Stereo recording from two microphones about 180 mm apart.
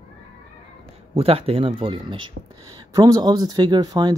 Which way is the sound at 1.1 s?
35° right (ahead or behind).